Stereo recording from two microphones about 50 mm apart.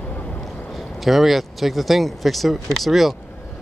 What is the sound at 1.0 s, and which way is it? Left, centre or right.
Speech, centre.